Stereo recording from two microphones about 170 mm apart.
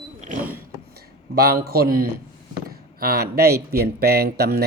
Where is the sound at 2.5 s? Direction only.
60° right (ahead or behind).